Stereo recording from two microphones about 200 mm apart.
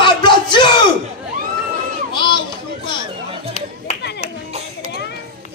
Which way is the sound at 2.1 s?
25° left (ahead or behind).